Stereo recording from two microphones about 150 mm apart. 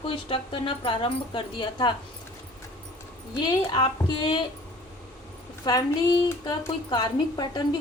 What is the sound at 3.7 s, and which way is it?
Speech, 30° left (ahead or behind).